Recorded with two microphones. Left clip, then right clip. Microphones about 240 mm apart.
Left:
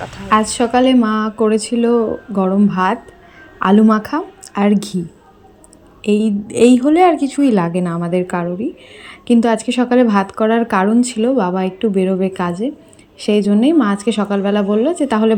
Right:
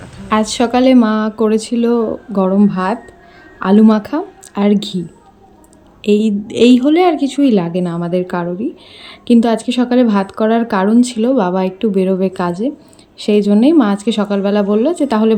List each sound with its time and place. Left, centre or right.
0.3 s speech: centre
6.0 s a woman's voice: left
6.5 s speech: centre